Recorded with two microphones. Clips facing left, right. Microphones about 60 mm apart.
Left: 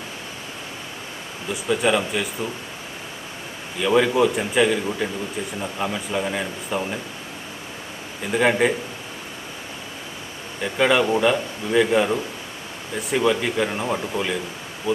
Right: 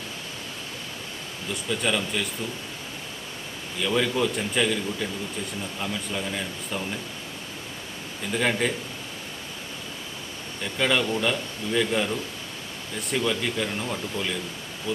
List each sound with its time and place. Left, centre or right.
1.5 s speech: centre
3.8 s speech: centre
8.2 s speech: centre
10.6 s speech: centre
13.1 s speech: centre
14.9 s speech: centre